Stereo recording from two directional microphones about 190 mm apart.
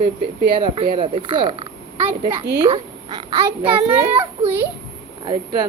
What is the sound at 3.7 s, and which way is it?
Speech, 10° right (ahead or behind).